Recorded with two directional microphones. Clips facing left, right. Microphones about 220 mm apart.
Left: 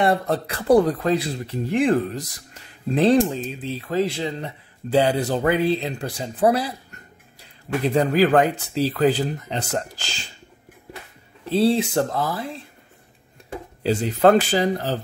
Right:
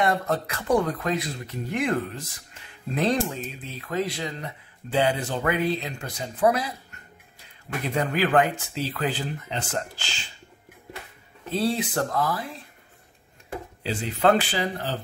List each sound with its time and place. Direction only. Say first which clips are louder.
0.0 s speech: left 4 dB; 35° left (ahead or behind)
11.4 s speech: left 7 dB; 30° left (ahead or behind)
13.8 s speech: left 5 dB; 40° left (ahead or behind)